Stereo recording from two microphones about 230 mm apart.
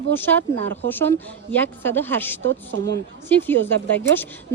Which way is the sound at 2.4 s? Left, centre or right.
Right.